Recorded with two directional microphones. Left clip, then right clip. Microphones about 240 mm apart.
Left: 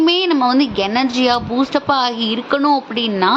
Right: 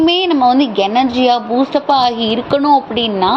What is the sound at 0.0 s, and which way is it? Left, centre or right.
A woman's voice, centre.